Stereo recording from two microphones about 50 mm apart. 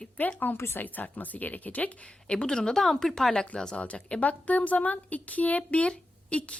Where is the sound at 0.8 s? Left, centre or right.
Left.